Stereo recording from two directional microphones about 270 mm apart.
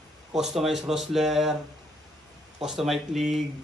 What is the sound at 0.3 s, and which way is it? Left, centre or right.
Speech, centre.